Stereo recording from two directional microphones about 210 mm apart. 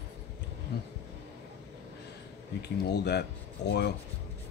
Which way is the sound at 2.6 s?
50° left (ahead or behind).